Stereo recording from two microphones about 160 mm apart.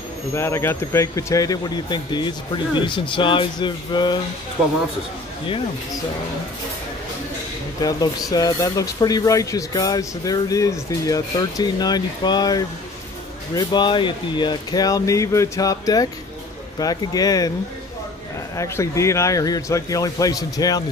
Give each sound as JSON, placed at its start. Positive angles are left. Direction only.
{"t": 0.3, "sound": "speech", "side_deg": 15}
{"t": 7.8, "sound": "speech", "side_deg": 25}
{"t": 18.6, "sound": "speech", "side_deg": 20}